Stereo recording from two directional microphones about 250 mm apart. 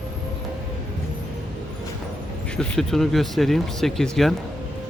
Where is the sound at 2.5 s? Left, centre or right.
Centre.